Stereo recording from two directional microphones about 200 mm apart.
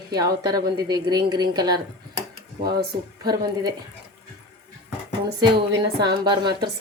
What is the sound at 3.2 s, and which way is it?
Speech, 20° right (ahead or behind).